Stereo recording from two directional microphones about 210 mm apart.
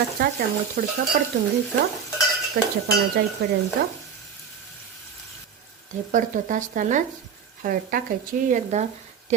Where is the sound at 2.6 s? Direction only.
55° right (ahead or behind).